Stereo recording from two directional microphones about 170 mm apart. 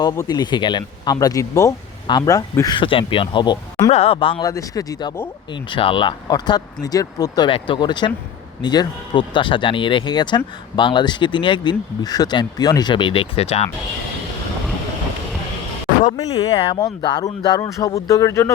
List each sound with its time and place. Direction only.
0.0 s speech: 25° left (ahead or behind)
16.1 s speech: 20° left (ahead or behind)
16.5 s speech: 30° left (ahead or behind); by 18.5 s 15° left (ahead or behind)